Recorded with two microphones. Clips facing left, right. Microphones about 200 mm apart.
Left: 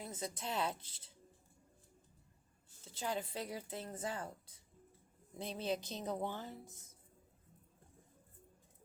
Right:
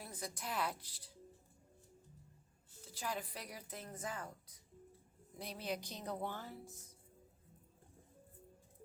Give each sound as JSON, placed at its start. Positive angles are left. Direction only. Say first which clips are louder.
{"t": 0.0, "sound": "a woman's voice", "louder": "left 3 dB", "side_deg": 20}
{"t": 2.8, "sound": "a woman's voice", "louder": "left 3 dB", "side_deg": 25}